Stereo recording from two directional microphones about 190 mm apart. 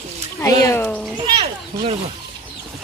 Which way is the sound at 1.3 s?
30° right (ahead or behind).